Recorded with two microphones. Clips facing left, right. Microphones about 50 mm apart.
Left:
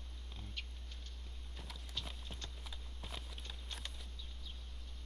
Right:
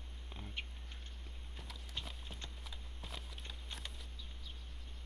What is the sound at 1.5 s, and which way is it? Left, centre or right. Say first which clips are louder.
Walk: even; centre.